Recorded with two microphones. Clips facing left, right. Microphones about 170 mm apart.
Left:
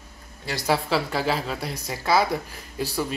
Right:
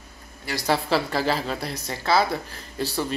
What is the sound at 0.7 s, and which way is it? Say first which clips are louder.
A woman's voice: right 1 dB; centre (ahead or behind).